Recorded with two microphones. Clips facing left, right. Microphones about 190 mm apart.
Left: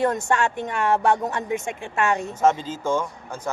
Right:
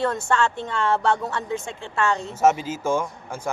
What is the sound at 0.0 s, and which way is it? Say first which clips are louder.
Speech: left 1 dB; 20° left (ahead or behind).